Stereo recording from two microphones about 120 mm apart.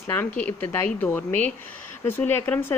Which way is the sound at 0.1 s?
15° left (ahead or behind).